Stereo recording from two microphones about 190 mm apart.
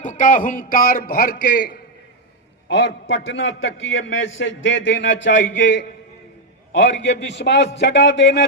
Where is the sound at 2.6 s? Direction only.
70° left (ahead or behind).